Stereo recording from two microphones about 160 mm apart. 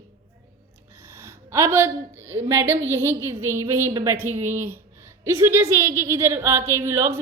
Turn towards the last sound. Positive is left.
turn(degrees=-15)  # may be behind; listen again after turning